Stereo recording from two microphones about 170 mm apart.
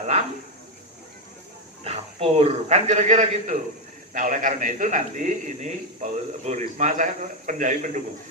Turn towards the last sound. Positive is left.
turn(degrees=-50)  # may be behind; listen again after turning